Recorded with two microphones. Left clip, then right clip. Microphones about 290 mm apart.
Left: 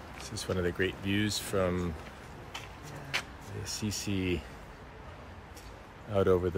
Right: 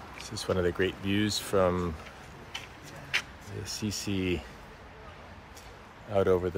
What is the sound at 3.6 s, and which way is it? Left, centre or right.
Speech, centre.